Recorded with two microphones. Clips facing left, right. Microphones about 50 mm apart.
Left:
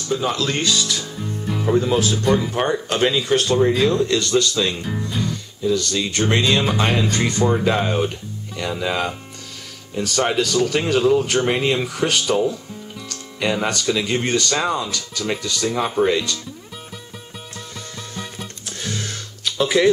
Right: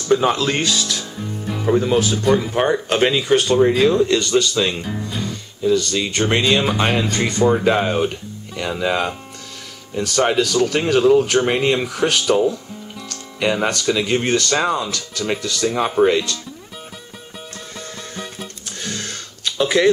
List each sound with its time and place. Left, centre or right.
0.1 s speech: right
0.4 s speech: centre
18.4 s music: centre